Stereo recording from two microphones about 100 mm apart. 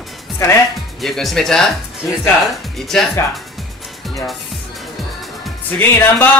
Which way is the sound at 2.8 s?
5° left (ahead or behind).